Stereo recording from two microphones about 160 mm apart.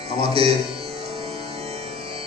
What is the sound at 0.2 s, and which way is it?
Music, 35° right (ahead or behind).